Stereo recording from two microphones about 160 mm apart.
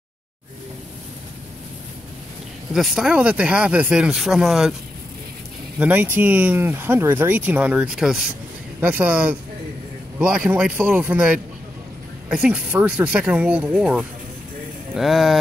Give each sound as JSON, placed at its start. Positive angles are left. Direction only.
{"t": 2.7, "sound": "speech", "side_deg": 0}
{"t": 5.8, "sound": "speech", "side_deg": -10}